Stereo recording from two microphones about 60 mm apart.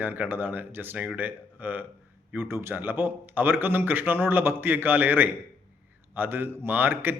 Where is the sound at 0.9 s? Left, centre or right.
Right.